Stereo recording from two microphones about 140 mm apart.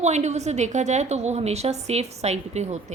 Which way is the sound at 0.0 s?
55° right (ahead or behind).